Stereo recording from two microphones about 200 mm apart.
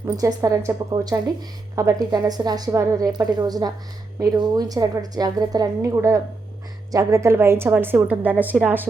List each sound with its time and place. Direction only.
0.0 s a woman's voice: 15° right (ahead or behind)